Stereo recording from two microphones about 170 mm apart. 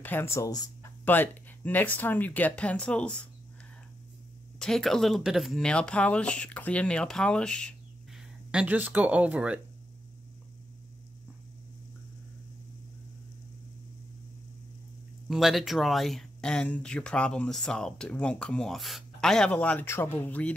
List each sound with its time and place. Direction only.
0.0 s speech: 15° left (ahead or behind)
4.6 s speech: 5° left (ahead or behind)
8.5 s speech: 10° right (ahead or behind)
15.2 s speech: centre (ahead or behind)